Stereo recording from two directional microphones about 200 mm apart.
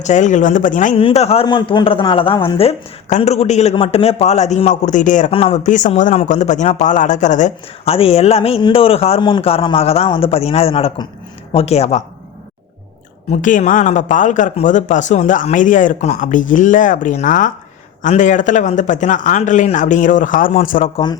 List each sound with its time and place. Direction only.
0.0 s a man's voice: 35° left (ahead or behind)
13.4 s a man's voice: 40° left (ahead or behind)